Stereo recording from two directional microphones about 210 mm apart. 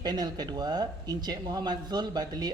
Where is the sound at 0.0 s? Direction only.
20° right (ahead or behind).